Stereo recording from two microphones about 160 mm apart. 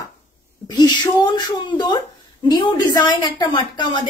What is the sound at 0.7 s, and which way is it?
Whimper, 25° left (ahead or behind).